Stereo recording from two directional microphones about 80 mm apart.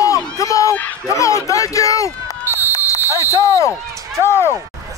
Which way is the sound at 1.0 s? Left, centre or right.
Left.